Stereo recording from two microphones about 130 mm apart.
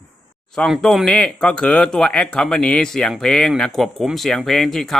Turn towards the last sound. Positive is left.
turn(degrees=0)  # may be behind; listen again after turning